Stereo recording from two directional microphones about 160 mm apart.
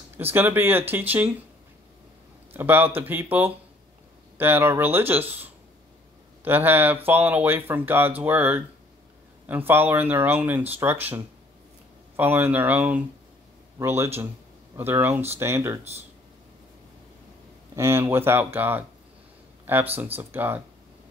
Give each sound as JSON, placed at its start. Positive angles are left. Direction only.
{"t": 0.2, "sound": "speech", "side_deg": -15}
{"t": 2.5, "sound": "speech", "side_deg": -10}
{"t": 12.2, "sound": "speech", "side_deg": -15}
{"t": 17.7, "sound": "speech", "side_deg": -15}